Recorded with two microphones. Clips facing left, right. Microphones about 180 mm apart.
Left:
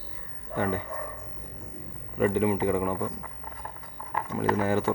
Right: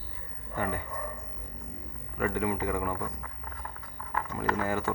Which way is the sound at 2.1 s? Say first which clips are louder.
Left 6 dB; 20° left (ahead or behind).